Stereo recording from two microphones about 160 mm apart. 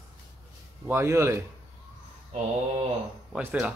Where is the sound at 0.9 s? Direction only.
15° right (ahead or behind).